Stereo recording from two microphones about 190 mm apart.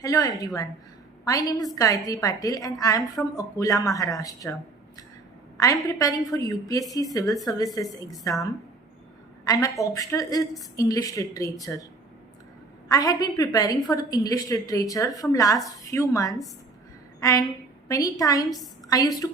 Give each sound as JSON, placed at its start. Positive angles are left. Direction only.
{"t": 0.0, "sound": "a woman's voice", "side_deg": 20}
{"t": 5.6, "sound": "a woman's voice", "side_deg": 20}
{"t": 9.4, "sound": "a woman's voice", "side_deg": 20}
{"t": 12.9, "sound": "a woman's voice", "side_deg": 20}